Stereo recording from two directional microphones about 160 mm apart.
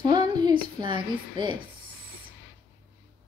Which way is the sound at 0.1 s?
25° right (ahead or behind).